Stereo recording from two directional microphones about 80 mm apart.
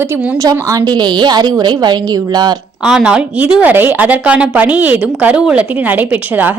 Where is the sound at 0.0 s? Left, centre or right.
Right.